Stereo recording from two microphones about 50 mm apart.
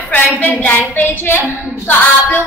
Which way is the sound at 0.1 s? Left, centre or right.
Left.